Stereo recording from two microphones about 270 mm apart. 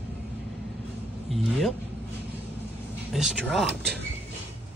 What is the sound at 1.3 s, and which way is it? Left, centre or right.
Speech, centre.